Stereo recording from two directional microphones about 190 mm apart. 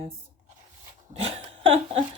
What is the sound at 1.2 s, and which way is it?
Laughter, 30° right (ahead or behind).